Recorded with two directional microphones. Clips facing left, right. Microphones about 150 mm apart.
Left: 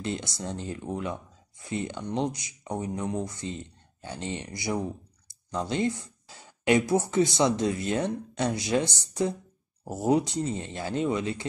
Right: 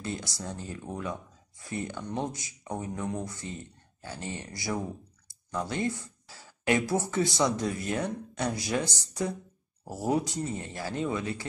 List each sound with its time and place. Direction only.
0.0 s speech: 25° left (ahead or behind)